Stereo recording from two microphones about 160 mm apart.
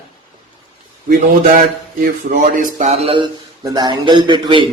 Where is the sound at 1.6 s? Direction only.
60° right (ahead or behind).